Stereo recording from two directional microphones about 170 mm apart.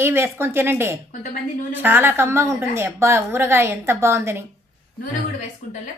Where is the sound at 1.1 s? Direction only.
55° left (ahead or behind).